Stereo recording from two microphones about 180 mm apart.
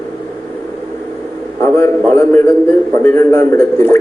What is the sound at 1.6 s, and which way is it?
A man's voice, 15° left (ahead or behind).